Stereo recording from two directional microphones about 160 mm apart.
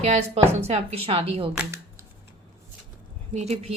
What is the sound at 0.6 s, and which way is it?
Speech, 40° right (ahead or behind).